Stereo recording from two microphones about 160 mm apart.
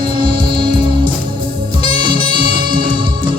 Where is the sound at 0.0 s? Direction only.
30° right (ahead or behind).